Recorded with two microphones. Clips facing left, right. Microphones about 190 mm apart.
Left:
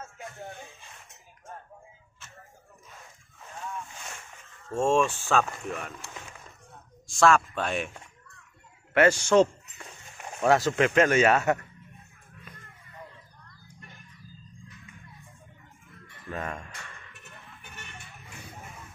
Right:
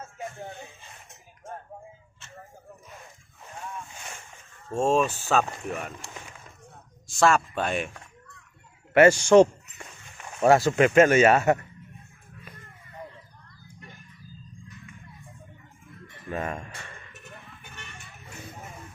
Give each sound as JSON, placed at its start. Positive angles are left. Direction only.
{"t": 4.9, "sound": "speech", "side_deg": -5}
{"t": 7.1, "sound": "speech", "side_deg": 0}
{"t": 8.9, "sound": "speech", "side_deg": -10}
{"t": 10.4, "sound": "speech", "side_deg": -25}
{"t": 10.8, "sound": "speech", "side_deg": -5}
{"t": 16.3, "sound": "music", "side_deg": -25}